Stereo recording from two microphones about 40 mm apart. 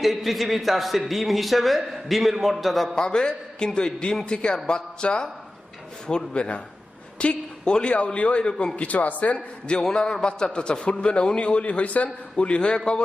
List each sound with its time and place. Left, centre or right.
0.0 s a man's voice: centre
2.9 s a man's voice: left
4.3 s a man's voice: left